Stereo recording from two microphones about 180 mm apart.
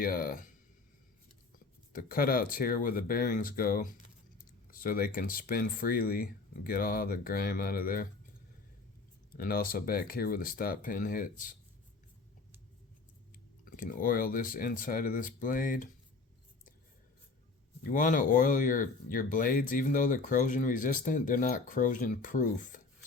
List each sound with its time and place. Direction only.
0.0 s speech: 55° left (ahead or behind)
1.5 s speech: 50° left (ahead or behind)
9.3 s speech: 50° left (ahead or behind)
13.7 s speech: 50° left (ahead or behind)
17.8 s speech: 50° left (ahead or behind)